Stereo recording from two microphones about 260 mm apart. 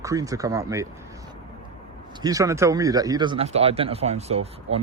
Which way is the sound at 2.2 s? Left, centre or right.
Centre.